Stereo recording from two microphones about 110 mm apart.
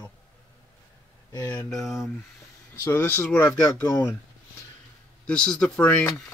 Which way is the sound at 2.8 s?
20° left (ahead or behind).